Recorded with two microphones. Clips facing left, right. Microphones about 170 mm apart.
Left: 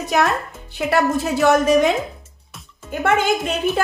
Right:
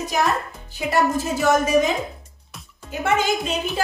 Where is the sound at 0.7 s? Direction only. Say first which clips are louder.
Left 2 dB; 65° left (ahead or behind).